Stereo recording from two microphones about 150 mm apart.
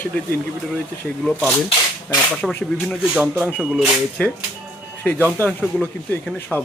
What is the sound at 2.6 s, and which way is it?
Speech, 5° left (ahead or behind).